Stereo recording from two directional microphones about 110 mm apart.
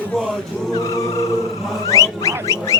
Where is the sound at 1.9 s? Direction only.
30° left (ahead or behind).